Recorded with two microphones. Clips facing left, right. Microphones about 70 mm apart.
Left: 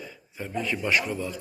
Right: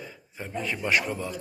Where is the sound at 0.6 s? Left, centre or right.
Right.